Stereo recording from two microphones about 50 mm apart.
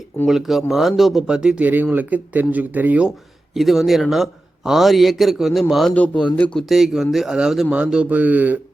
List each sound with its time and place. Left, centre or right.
0.3 s a man's voice: centre
1.3 s speech: centre
1.6 s speech: right
3.5 s a man's voice: centre
5.9 s speech: left
6.7 s a man's voice: centre
8.1 s speech: right